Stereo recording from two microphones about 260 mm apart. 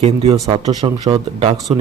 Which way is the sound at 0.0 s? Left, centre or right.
Right.